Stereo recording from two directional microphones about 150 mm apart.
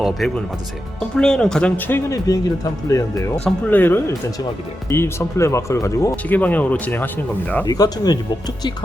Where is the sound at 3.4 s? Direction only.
10° left (ahead or behind).